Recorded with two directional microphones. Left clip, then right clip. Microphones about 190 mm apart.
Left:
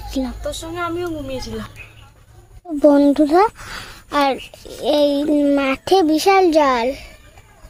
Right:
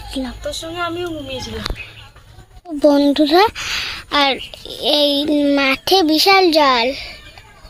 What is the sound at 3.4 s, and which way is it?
A child's voice, 15° right (ahead or behind).